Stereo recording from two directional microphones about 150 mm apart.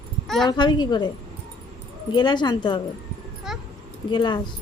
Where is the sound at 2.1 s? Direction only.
30° left (ahead or behind).